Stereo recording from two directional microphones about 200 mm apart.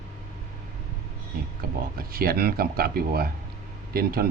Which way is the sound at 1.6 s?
50° right (ahead or behind).